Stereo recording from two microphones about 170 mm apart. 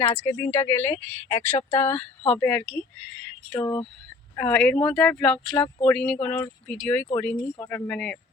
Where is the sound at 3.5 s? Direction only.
20° left (ahead or behind).